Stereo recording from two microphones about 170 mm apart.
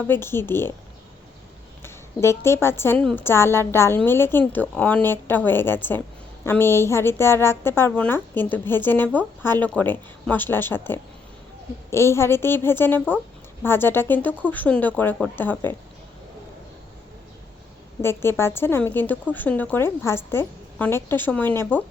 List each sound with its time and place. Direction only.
0.1 s a woman's voice: 15° left (ahead or behind)
1.8 s a woman's voice: 15° left (ahead or behind)
18.0 s a woman's voice: 15° left (ahead or behind)